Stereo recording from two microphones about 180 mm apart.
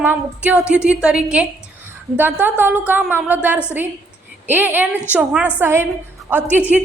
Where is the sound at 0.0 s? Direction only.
10° right (ahead or behind).